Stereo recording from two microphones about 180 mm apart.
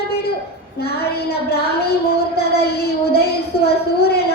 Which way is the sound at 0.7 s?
60° left (ahead or behind).